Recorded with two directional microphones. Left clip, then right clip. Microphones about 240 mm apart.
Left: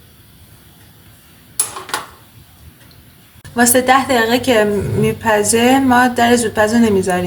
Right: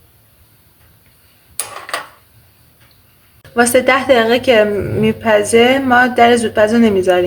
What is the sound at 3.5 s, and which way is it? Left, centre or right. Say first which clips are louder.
Speech: right 1 dB; right.